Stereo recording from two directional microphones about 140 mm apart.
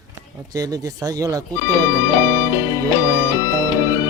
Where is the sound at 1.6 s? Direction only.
25° left (ahead or behind).